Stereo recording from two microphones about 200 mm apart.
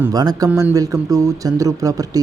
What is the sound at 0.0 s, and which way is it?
Speech, 20° right (ahead or behind).